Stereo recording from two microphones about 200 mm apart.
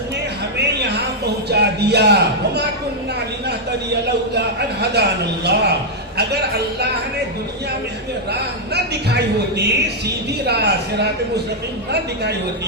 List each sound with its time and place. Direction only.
0.8 s a sound: 55° right (ahead or behind)
1.5 s a man's voice: 55° right (ahead or behind)
4.0 s a man's voice: 55° right (ahead or behind)
8.3 s a man's voice: 55° right (ahead or behind)